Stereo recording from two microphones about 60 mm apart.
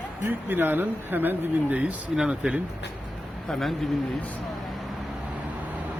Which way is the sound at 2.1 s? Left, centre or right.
Centre.